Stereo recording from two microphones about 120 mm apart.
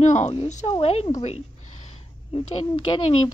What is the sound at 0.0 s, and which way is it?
Speech, 80° left.